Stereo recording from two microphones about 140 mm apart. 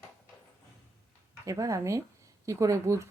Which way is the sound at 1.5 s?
20° right (ahead or behind).